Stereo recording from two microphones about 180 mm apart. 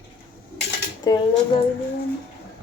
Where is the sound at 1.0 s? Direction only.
25° left (ahead or behind).